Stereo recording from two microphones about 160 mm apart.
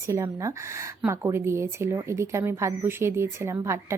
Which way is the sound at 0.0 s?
20° right (ahead or behind).